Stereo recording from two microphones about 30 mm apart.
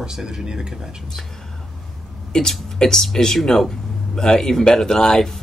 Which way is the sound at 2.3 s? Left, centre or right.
Left.